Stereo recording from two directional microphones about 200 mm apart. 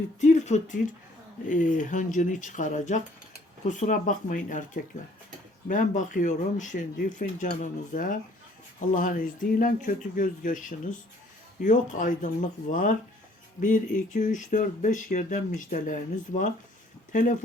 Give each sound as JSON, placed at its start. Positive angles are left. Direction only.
{"t": 0.2, "sound": "speech", "side_deg": 35}